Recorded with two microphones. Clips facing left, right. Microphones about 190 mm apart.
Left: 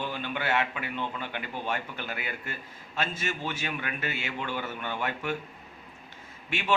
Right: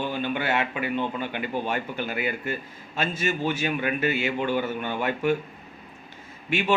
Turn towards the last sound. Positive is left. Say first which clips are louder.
# right 5 dB
turn(degrees=-10)  # may be behind; listen again after turning